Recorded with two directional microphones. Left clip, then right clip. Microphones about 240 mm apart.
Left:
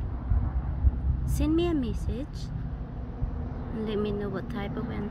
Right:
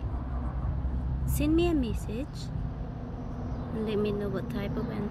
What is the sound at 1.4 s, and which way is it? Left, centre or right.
Speech, centre.